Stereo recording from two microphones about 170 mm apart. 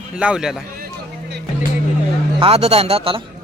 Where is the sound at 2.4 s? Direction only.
35° right (ahead or behind).